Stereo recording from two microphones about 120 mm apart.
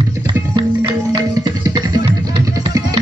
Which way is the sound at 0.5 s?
45° right (ahead or behind).